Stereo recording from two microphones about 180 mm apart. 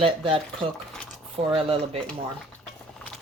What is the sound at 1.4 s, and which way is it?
Speech, 35° right (ahead or behind).